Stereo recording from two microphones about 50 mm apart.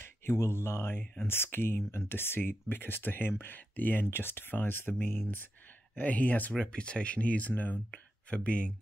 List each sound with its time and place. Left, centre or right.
0.0 s speech: left
5.9 s speech: left
6.6 s speech: left